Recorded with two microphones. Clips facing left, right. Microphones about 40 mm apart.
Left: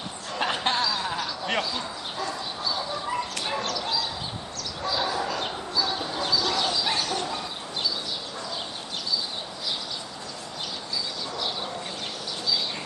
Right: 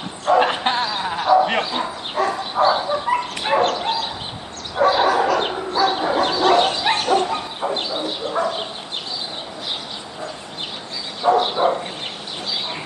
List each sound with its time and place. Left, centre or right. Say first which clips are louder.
0.3 s bow-wow: right 10 dB; right
1.2 s a sound: right 17 dB; right
1.6 s bow-wow: right 7 dB; right
11.2 s bow-wow: right 15 dB; right